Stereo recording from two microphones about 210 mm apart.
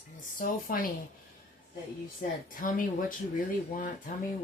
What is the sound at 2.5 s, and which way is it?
Speech, 40° left (ahead or behind).